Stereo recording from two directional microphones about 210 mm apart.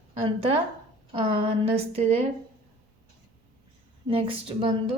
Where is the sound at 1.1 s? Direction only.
30° right (ahead or behind).